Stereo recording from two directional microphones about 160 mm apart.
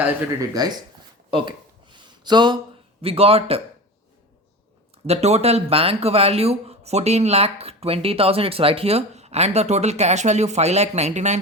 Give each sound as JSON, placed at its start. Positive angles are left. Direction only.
{"t": 0.0, "sound": "speech", "side_deg": -20}
{"t": 1.3, "sound": "a sound", "side_deg": -30}
{"t": 3.0, "sound": "speech", "side_deg": -35}
{"t": 5.0, "sound": "speech", "side_deg": -40}